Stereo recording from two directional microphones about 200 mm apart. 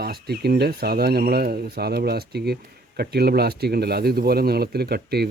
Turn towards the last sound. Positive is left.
turn(degrees=-55)  # may be behind; listen again after turning